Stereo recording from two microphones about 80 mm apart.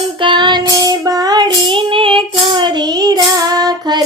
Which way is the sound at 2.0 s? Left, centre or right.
Right.